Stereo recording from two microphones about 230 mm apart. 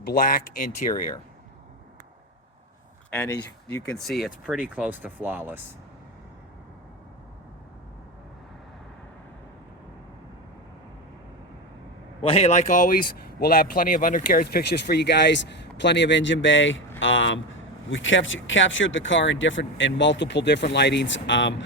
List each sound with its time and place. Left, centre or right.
0.0 s speech: left
3.2 s speech: centre
12.2 s speech: left